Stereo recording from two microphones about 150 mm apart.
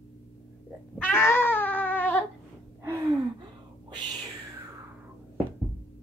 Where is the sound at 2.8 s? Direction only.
20° right (ahead or behind).